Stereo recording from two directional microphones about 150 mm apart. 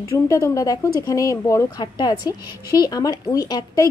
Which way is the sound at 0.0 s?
20° left (ahead or behind).